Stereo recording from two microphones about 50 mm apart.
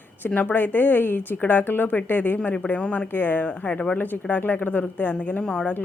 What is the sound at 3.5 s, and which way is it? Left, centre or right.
Speech, left.